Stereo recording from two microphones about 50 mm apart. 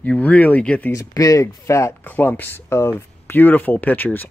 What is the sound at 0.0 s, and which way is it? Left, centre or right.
Speech, left.